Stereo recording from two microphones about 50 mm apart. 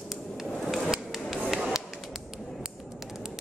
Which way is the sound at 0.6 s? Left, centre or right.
Centre.